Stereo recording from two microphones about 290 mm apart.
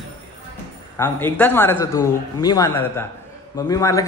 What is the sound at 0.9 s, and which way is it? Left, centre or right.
A man's voice, centre.